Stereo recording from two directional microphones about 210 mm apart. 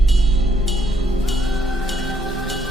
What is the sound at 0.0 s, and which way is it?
Music, centre (ahead or behind).